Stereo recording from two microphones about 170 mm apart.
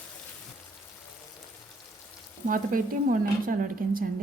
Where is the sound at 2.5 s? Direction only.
55° right (ahead or behind).